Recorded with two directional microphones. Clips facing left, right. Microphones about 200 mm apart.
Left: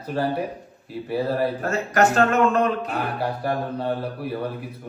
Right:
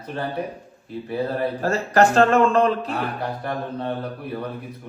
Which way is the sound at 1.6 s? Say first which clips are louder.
Right 6 dB; 35° right (ahead or behind).